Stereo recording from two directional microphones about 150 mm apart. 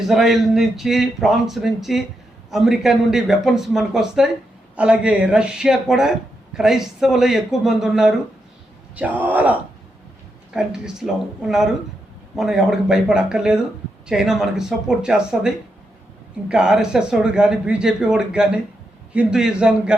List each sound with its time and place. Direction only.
0.1 s speech: centre (ahead or behind)